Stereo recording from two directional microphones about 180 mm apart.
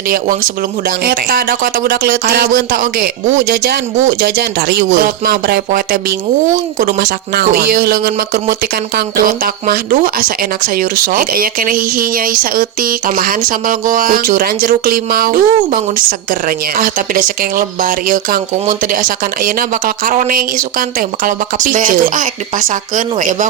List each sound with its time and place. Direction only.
0.9 s speech: 55° right (ahead or behind)